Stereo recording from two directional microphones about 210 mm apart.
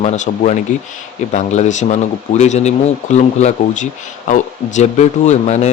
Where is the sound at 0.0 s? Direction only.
35° left (ahead or behind).